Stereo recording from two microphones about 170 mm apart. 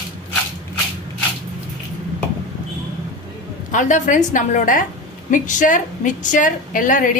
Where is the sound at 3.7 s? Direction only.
45° left (ahead or behind).